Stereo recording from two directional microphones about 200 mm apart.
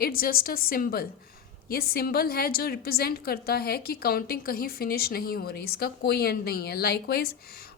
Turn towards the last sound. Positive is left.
turn(degrees=50)  # may be behind; listen again after turning